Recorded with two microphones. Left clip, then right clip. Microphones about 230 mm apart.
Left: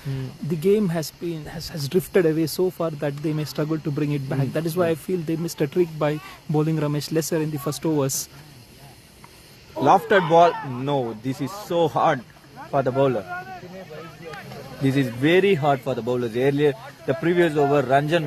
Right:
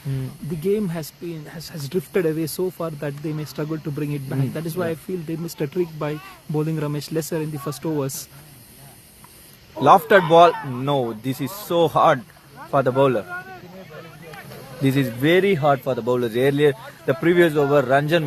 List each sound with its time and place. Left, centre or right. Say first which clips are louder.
0.6 s speech: left 3 dB; left
9.8 s speech: right 3 dB; right
10.5 s speech: right 2 dB; right
14.8 s a man's voice: right 1 dB; right